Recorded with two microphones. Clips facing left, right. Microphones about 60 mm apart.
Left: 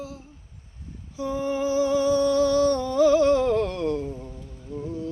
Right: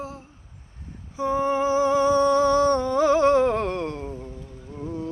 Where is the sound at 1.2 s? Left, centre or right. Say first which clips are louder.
Right 4 dB; right.